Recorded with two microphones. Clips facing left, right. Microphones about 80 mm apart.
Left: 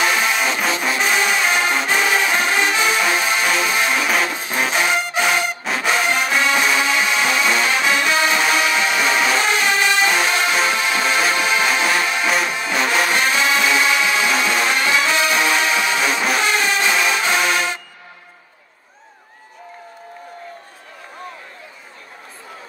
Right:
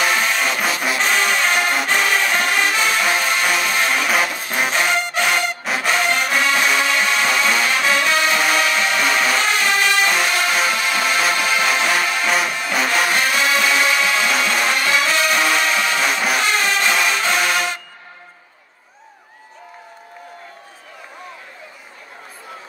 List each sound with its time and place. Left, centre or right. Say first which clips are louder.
0.1 s music: even; centre